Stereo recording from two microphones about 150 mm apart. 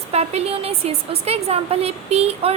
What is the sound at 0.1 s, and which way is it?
A woman's voice, 45° right (ahead or behind).